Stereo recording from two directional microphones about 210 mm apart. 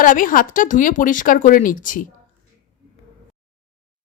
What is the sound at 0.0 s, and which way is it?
Speech, 40° left (ahead or behind).